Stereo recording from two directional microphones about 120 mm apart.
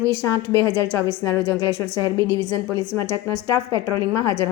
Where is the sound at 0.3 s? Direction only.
25° left (ahead or behind).